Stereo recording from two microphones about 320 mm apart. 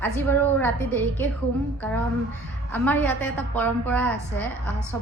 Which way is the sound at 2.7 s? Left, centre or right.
Centre.